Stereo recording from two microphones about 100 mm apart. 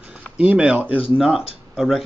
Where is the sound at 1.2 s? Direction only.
5° right (ahead or behind).